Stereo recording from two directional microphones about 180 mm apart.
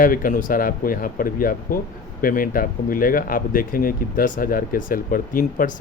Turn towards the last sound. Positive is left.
turn(degrees=50)  # may be behind; listen again after turning